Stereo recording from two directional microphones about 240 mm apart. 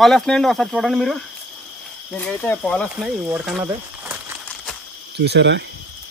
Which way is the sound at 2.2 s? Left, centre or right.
Centre.